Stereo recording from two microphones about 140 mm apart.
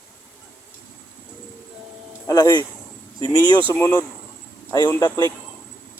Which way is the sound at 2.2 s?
25° left (ahead or behind).